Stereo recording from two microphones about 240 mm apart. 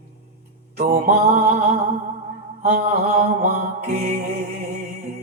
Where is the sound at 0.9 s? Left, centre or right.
Right.